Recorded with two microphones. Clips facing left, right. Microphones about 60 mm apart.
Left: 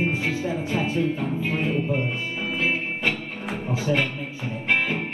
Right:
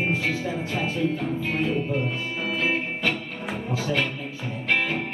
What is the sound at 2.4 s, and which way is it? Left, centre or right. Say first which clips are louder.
Music: even; centre.